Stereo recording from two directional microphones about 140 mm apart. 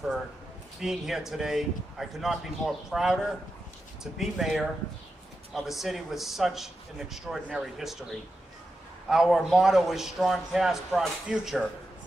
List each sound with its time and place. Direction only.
0.8 s a man's voice: 5° right (ahead or behind)
9.0 s a man's voice: centre (ahead or behind)